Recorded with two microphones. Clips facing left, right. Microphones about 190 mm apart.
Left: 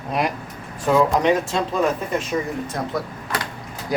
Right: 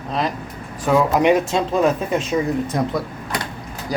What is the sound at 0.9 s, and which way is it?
Speech, centre (ahead or behind).